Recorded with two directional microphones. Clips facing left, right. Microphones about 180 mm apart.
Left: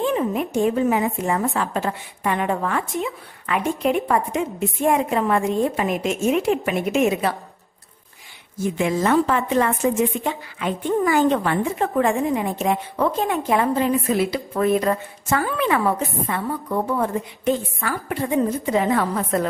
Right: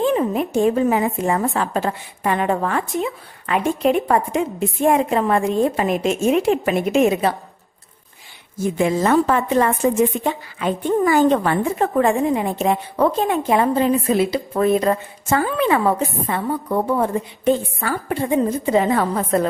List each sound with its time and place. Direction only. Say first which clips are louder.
0.0 s a woman's voice: right 3 dB; 35° right (ahead or behind)
8.7 s a woman's voice: right 2 dB; 40° right (ahead or behind)